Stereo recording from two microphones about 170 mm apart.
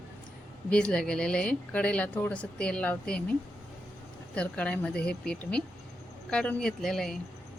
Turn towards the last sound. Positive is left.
turn(degrees=0)  # may be behind; listen again after turning